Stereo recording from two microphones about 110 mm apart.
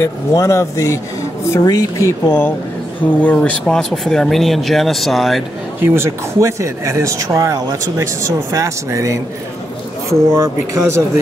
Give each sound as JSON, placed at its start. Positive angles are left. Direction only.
{"t": 0.0, "sound": "speech", "side_deg": 25}
{"t": 5.8, "sound": "speech", "side_deg": -20}
{"t": 10.3, "sound": "speech", "side_deg": -25}